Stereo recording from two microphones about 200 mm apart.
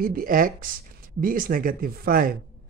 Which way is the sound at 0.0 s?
45° right (ahead or behind).